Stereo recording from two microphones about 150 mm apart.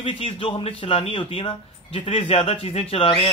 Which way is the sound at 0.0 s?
35° left (ahead or behind).